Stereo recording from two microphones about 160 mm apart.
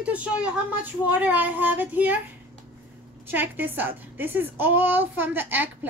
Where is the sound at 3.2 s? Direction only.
10° right (ahead or behind).